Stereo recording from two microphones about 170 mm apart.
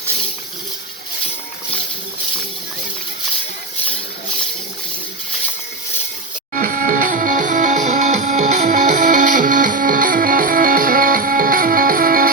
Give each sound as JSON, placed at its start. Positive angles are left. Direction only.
{"t": 6.5, "sound": "music", "side_deg": -50}